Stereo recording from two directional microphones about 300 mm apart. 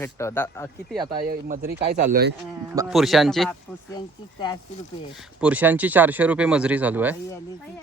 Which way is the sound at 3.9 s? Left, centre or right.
Centre.